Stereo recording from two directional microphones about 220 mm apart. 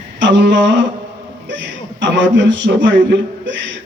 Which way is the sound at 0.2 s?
55° right (ahead or behind).